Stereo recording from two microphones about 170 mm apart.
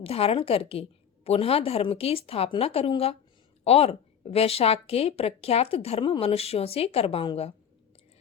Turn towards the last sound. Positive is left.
turn(degrees=35)  # may be behind; listen again after turning